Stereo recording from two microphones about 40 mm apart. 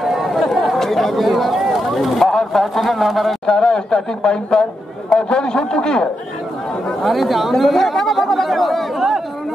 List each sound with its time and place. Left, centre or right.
0.0 s chatter: centre
0.8 s a man's voice: centre
3.4 s speech: centre
7.1 s a man's voice: centre